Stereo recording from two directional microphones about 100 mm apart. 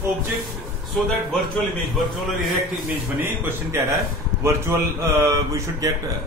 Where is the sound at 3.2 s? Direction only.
25° right (ahead or behind).